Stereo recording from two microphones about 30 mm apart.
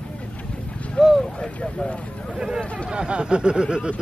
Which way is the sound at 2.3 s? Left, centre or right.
Right.